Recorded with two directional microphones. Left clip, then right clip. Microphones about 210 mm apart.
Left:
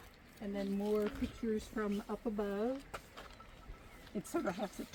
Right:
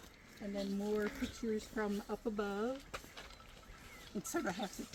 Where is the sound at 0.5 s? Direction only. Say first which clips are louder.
Left 2 dB; 5° left (ahead or behind).